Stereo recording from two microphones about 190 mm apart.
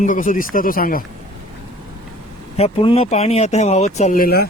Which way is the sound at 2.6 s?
35° left (ahead or behind).